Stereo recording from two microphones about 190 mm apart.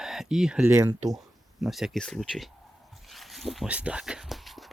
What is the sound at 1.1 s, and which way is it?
Speech, centre (ahead or behind).